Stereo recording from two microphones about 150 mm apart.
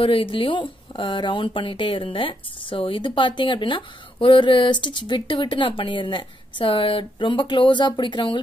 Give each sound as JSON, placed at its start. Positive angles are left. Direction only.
{"t": 0.0, "sound": "speech", "side_deg": 35}